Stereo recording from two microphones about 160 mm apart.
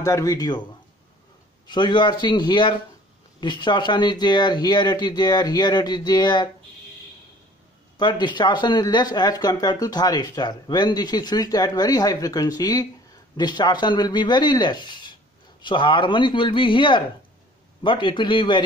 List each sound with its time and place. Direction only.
0.0 s speech: 20° left (ahead or behind)
1.7 s speech: 30° left (ahead or behind)
8.0 s speech: 30° left (ahead or behind)